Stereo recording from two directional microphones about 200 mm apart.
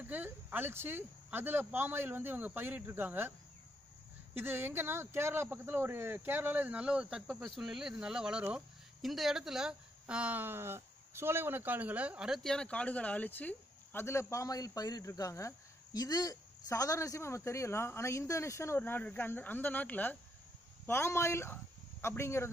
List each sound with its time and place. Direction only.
0.0 s speech: 10° right (ahead or behind); by 22.5 s 15° left (ahead or behind)